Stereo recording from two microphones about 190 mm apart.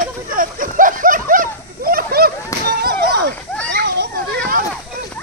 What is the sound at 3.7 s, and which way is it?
Children playing, 60° right (ahead or behind).